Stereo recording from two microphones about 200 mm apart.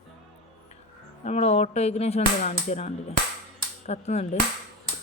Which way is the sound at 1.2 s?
35° left (ahead or behind).